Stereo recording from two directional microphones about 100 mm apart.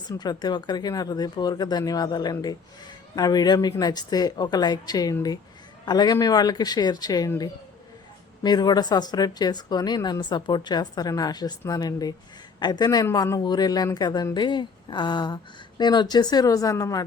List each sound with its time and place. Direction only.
0.1 s speech: 45° left (ahead or behind)
8.4 s speech: 45° left (ahead or behind)